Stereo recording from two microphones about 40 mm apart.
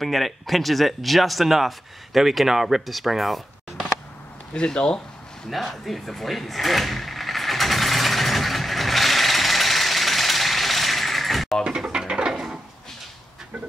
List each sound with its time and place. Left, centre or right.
0.0 s speech: centre
4.6 s speech: left
5.7 s drawer open or close: centre
11.6 s speech: centre
12.1 s a sound: centre